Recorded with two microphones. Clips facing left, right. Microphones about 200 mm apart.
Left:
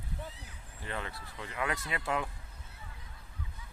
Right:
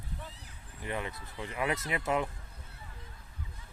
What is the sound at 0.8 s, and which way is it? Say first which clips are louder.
Speech: right 3 dB; 15° right (ahead or behind).